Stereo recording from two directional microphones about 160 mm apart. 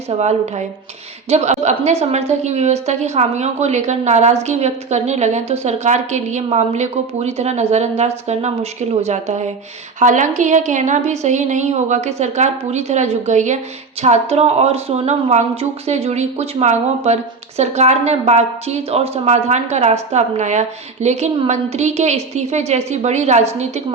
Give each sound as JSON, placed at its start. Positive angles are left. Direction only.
{"t": 0.2, "sound": "a woman's voice", "side_deg": -45}